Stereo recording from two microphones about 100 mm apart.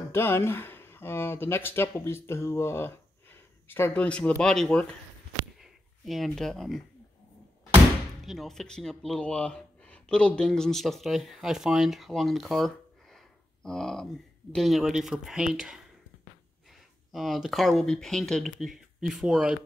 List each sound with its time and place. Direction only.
0.1 s speech: 25° left (ahead or behind)
4.0 s speech: 10° left (ahead or behind)
8.3 s speech: centre (ahead or behind)